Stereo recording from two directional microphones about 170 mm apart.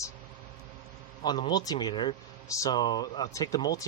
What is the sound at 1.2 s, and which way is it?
Speech, 25° left (ahead or behind).